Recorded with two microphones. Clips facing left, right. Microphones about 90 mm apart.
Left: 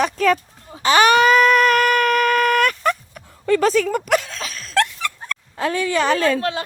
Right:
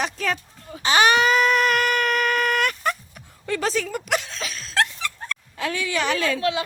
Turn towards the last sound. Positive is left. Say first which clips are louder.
# left 4 dB
turn(degrees=45)  # may be behind; listen again after turning